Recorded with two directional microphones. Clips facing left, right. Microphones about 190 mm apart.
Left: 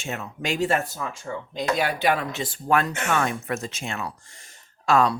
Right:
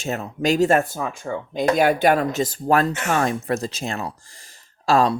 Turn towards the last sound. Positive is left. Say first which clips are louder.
# right 2 dB
turn(degrees=-35)  # may be behind; listen again after turning